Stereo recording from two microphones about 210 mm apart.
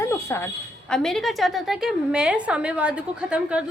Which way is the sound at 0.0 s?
10° left (ahead or behind).